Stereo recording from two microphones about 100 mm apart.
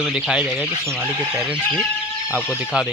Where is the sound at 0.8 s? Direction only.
20° right (ahead or behind).